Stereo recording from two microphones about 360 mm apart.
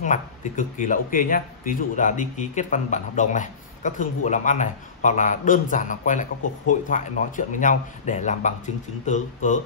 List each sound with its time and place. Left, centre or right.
0.0 s speech: left